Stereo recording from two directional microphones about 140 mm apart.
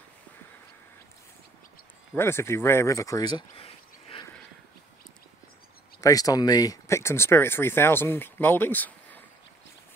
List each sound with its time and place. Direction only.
2.1 s speech: 15° left (ahead or behind); by 4.3 s 40° left (ahead or behind)
5.9 s speech: 25° left (ahead or behind)